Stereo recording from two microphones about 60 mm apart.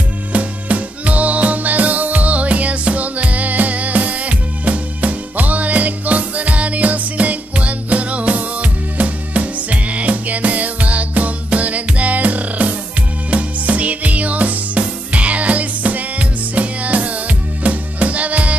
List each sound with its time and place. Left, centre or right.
0.3 s music: right